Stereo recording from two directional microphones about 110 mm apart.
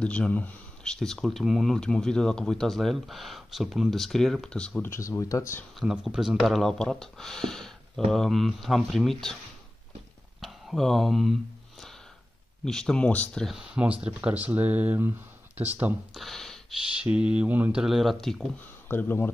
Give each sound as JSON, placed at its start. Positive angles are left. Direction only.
{"t": 0.0, "sound": "speech", "side_deg": 10}
{"t": 4.8, "sound": "speech", "side_deg": 25}
{"t": 5.8, "sound": "speech", "side_deg": -5}
{"t": 10.4, "sound": "speech", "side_deg": 0}
{"t": 12.6, "sound": "speech", "side_deg": 5}
{"t": 16.1, "sound": "a sound", "side_deg": 0}
{"t": 17.0, "sound": "speech", "side_deg": -10}
{"t": 18.9, "sound": "speech", "side_deg": 20}